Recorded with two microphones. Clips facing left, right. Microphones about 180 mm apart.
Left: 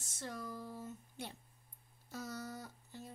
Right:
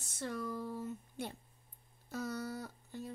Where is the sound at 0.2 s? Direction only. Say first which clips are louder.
Right 6 dB; 65° right (ahead or behind).